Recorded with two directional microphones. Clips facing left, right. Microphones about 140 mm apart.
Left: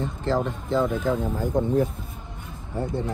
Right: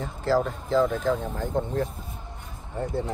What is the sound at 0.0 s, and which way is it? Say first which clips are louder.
Speech: right 1 dB; 5° right (ahead or behind).